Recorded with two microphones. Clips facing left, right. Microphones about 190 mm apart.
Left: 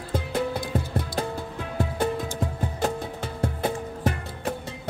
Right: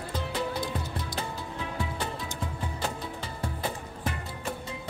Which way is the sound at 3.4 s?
65° left (ahead or behind).